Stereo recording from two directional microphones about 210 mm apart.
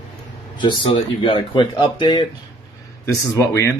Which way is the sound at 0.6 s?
20° left (ahead or behind).